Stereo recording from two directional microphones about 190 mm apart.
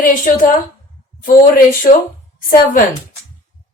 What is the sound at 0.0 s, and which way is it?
Speech, 45° left (ahead or behind).